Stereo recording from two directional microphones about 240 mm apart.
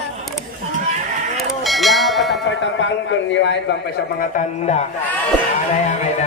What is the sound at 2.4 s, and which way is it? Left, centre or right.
A man's voice, left.